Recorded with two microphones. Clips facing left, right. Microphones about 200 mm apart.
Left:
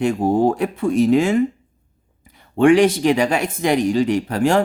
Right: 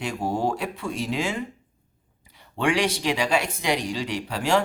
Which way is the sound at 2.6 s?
50° left (ahead or behind).